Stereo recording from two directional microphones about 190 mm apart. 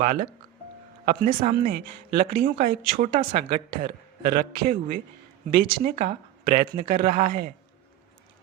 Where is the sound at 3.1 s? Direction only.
45° right (ahead or behind).